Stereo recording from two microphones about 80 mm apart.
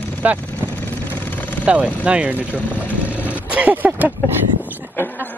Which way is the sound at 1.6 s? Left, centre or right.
Centre.